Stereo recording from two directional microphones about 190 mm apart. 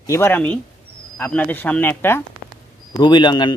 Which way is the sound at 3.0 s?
25° left (ahead or behind).